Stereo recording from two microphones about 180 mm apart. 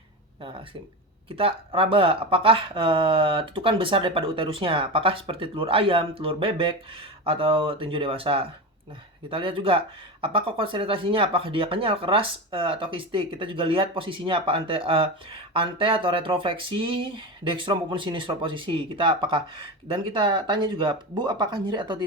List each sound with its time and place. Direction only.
0.4 s speech: 30° right (ahead or behind)